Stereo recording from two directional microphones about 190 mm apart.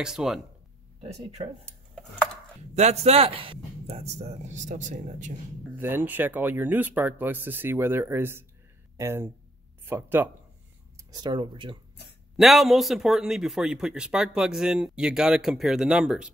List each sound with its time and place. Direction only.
0.0 s a man's voice: centre (ahead or behind)
1.0 s a man's voice: 35° right (ahead or behind)
2.7 s a man's voice: 35° right (ahead or behind)
5.8 s speech: 10° right (ahead or behind)
12.4 s a man's voice: centre (ahead or behind)